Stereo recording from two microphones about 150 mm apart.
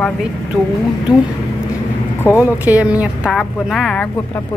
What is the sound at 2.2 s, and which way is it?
Speech, 20° left (ahead or behind).